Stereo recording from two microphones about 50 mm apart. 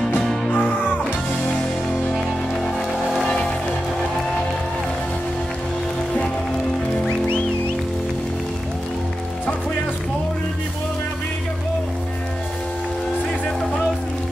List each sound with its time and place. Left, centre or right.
0.5 s music: left